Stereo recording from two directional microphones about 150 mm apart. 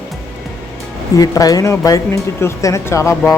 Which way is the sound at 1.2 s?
25° left (ahead or behind).